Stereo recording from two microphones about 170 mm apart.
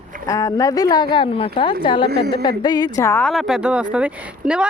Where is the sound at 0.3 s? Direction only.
20° left (ahead or behind).